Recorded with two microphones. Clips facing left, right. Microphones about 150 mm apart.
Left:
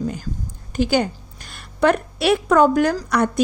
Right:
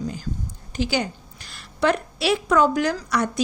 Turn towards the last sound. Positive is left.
turn(degrees=55)  # may be behind; listen again after turning